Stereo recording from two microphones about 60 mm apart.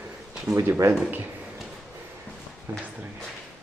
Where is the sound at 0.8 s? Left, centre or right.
Right.